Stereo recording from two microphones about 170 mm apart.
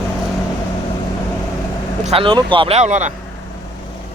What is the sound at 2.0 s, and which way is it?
Speech, 30° right (ahead or behind).